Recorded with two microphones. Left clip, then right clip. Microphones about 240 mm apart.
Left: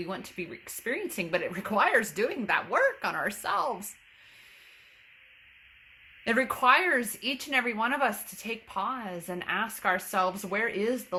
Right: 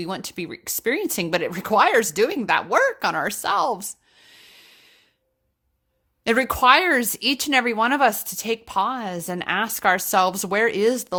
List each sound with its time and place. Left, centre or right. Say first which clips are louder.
0.0 s speech: right 7 dB; right
6.2 s speech: right 7 dB; right